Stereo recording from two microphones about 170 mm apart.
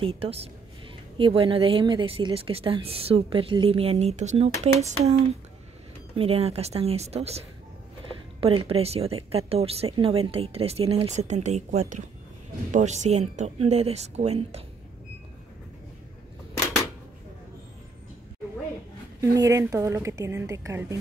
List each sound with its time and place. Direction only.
0.0 s speech: 35° right (ahead or behind)
19.3 s a woman's voice: 20° right (ahead or behind)